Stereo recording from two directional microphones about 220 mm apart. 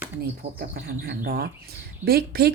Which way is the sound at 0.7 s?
45° right (ahead or behind).